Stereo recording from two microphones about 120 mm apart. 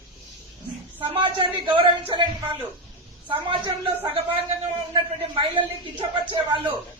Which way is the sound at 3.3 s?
45° right (ahead or behind).